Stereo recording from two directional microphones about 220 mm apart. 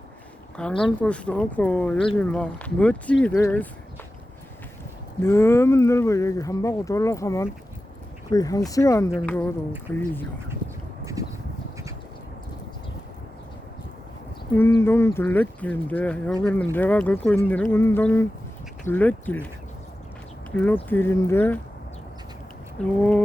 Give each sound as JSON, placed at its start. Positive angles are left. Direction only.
{"t": 0.5, "sound": "speech", "side_deg": 5}
{"t": 5.2, "sound": "speech", "side_deg": 10}
{"t": 11.0, "sound": "a sound", "side_deg": -15}
{"t": 14.5, "sound": "speech", "side_deg": 10}
{"t": 20.6, "sound": "speech", "side_deg": 10}
{"t": 23.0, "sound": "speech", "side_deg": 5}